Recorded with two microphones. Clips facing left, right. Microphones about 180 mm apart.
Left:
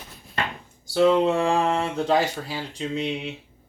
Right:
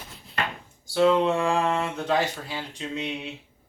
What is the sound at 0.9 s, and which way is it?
Speech, 35° left (ahead or behind).